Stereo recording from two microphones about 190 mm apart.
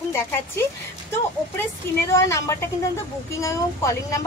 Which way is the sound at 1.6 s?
10° left (ahead or behind).